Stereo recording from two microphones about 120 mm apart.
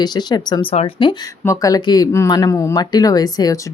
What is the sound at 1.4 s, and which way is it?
Speech, 30° left (ahead or behind).